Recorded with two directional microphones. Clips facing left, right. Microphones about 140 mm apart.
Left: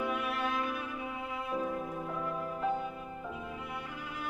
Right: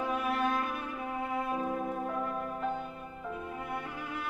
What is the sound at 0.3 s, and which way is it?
Music, 45° right (ahead or behind).